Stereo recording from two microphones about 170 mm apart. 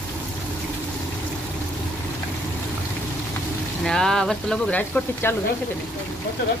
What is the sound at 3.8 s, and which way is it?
Speech, 5° left (ahead or behind).